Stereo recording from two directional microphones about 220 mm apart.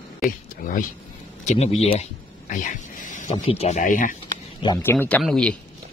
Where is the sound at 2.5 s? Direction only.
35° left (ahead or behind).